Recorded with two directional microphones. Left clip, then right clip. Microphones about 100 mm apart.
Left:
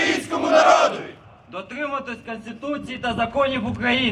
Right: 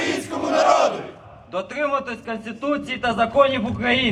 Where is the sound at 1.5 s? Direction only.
40° right (ahead or behind); by 3.4 s 25° right (ahead or behind).